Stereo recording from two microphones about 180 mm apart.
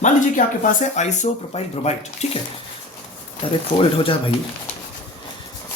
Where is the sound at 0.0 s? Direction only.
45° left (ahead or behind).